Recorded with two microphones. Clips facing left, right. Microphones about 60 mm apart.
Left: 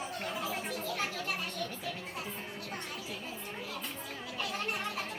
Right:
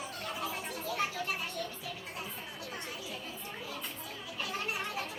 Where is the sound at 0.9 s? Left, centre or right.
Centre.